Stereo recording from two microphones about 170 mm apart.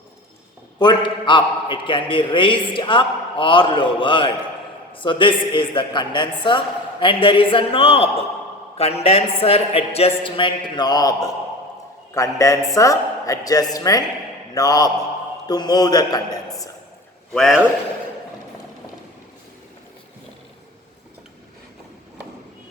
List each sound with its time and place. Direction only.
0.8 s a man's voice: 25° left (ahead or behind)
17.3 s a man's voice: centre (ahead or behind)